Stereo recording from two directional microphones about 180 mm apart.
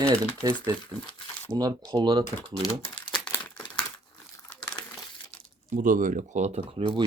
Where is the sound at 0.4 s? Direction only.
20° right (ahead or behind).